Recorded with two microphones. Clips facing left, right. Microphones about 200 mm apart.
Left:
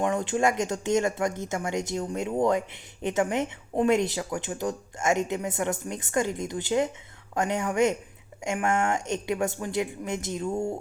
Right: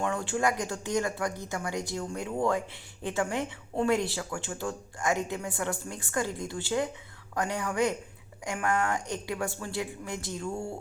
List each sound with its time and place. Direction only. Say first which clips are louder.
0.0 s speech: left 4 dB; 20° left (ahead or behind)